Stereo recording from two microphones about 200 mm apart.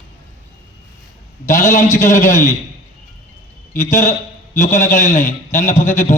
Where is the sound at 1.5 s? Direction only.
40° left (ahead or behind).